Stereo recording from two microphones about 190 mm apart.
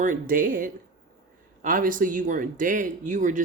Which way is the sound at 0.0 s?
45° right (ahead or behind).